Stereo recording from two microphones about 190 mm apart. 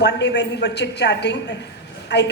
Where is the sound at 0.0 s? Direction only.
60° left (ahead or behind).